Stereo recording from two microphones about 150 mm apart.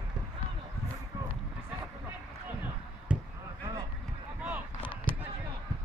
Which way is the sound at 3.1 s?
5° right (ahead or behind).